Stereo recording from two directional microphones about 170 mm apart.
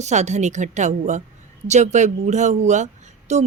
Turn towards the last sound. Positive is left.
turn(degrees=-40)  # may be behind; listen again after turning